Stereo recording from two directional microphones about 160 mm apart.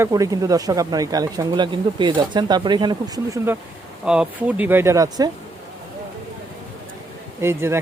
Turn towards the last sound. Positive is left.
turn(degrees=-15)  # may be behind; listen again after turning